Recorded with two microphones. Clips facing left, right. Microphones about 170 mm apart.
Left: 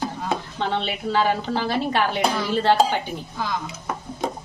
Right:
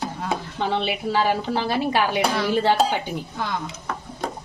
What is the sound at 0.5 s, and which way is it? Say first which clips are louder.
Speech: right 1 dB; 10° right (ahead or behind).